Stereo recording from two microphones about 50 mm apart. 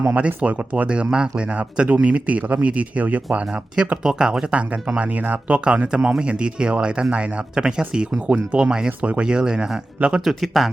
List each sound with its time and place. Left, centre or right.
0.2 s speech: right
0.9 s speech: right
4.0 s speech: centre
4.9 s speech: right
10.2 s speech: centre